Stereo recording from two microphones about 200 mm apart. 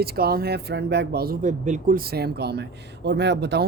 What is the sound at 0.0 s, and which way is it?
Speech, 50° right (ahead or behind).